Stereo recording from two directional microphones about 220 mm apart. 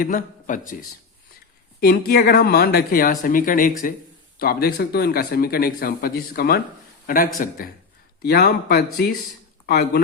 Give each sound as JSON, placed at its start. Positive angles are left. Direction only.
{"t": 0.0, "sound": "a man's voice", "side_deg": 35}